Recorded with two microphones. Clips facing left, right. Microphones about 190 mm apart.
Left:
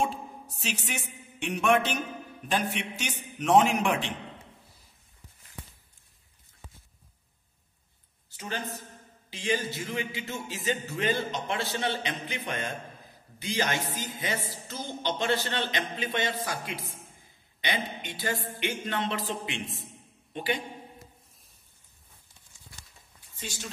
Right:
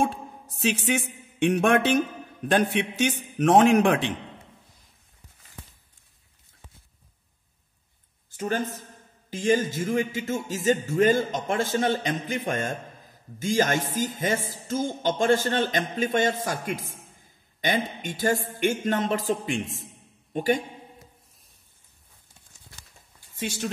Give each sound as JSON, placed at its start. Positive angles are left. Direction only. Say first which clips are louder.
{"t": 0.1, "sound": "a sound", "louder": "right 1 dB", "side_deg": -65}
{"t": 2.5, "sound": "a man's voice", "louder": "right 7 dB", "side_deg": -60}
{"t": 8.3, "sound": "a man's voice", "louder": "right 8 dB", "side_deg": -50}
{"t": 9.3, "sound": "music", "louder": "right 7 dB", "side_deg": -45}